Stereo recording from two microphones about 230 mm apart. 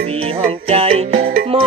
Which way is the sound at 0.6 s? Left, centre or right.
Right.